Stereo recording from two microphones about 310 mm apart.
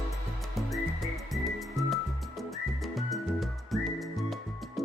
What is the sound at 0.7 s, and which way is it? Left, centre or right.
Music, centre.